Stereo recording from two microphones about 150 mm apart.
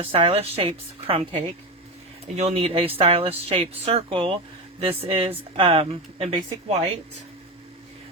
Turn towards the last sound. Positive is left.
turn(degrees=-40)  # may be behind; listen again after turning